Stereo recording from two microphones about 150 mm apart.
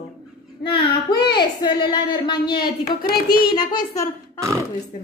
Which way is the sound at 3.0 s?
90° left.